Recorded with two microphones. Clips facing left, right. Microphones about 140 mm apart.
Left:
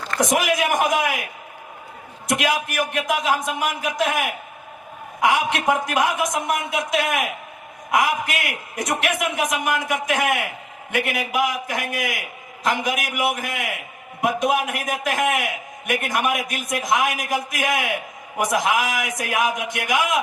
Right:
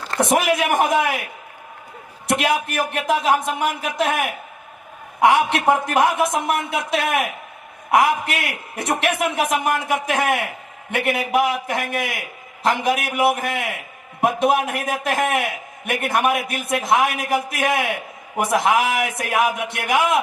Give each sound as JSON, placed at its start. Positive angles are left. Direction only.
{"t": 0.3, "sound": "a man's voice", "side_deg": -30}
{"t": 2.2, "sound": "a man's voice", "side_deg": -30}
{"t": 4.0, "sound": "a man's voice", "side_deg": -65}
{"t": 5.2, "sound": "a man's voice", "side_deg": -30}